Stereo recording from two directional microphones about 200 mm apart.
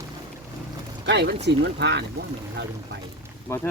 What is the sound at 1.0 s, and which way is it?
Speech, 60° right (ahead or behind).